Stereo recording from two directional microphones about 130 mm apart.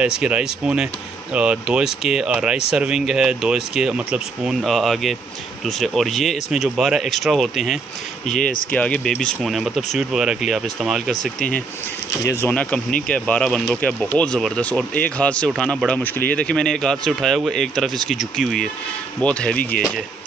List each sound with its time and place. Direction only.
0.0 s speech: 10° right (ahead or behind)
8.3 s speech: 85° left
8.7 s speech: 10° left (ahead or behind)
12.2 s speech: 25° left (ahead or behind)
12.4 s speech: 10° left (ahead or behind)